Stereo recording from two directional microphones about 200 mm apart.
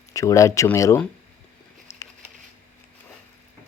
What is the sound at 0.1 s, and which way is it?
Speech, 15° left (ahead or behind).